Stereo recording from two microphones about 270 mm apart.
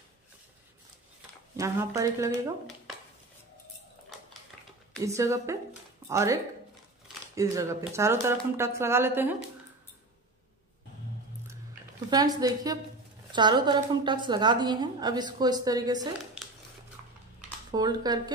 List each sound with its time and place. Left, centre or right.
1.6 s a woman's voice: centre
5.0 s a woman's voice: centre
12.1 s a woman's voice: centre
17.6 s a woman's voice: centre